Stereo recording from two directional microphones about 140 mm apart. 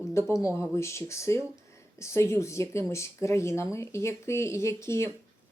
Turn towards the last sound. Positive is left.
turn(degrees=20)  # may be behind; listen again after turning